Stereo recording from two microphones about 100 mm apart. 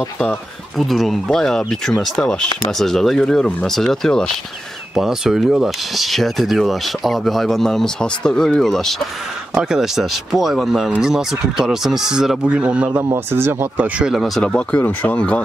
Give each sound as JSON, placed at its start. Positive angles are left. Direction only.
{"t": 0.7, "sound": "speech", "side_deg": 0}
{"t": 13.0, "sound": "speech", "side_deg": -25}
{"t": 14.1, "sound": "speech", "side_deg": 0}